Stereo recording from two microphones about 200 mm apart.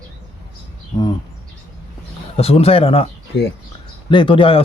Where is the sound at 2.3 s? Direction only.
30° left (ahead or behind).